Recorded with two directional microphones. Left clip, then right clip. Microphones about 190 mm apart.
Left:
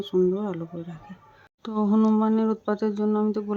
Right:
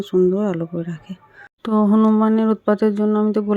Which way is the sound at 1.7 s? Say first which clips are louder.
Right 7 dB; 25° right (ahead or behind).